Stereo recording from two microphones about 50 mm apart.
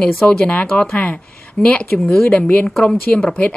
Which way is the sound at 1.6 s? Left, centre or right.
Centre.